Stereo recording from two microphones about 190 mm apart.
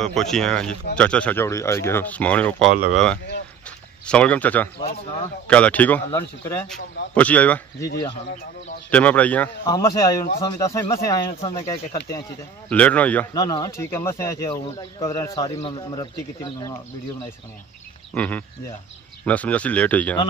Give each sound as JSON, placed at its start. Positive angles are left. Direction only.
{"t": 0.0, "sound": "speech", "side_deg": 0}
{"t": 8.9, "sound": "speech", "side_deg": 5}
{"t": 9.7, "sound": "speech", "side_deg": 20}
{"t": 12.6, "sound": "speech", "side_deg": 5}
{"t": 13.3, "sound": "speech", "side_deg": 20}
{"t": 15.5, "sound": "speech", "side_deg": 35}
{"t": 15.9, "sound": "speech", "side_deg": 20}
{"t": 18.1, "sound": "speech", "side_deg": 5}